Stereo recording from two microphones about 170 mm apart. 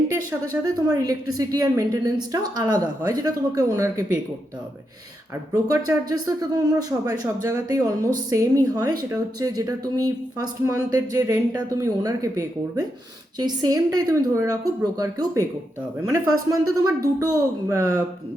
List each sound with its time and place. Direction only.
0.6 s speech: 20° right (ahead or behind)
5.3 s speech: 20° right (ahead or behind)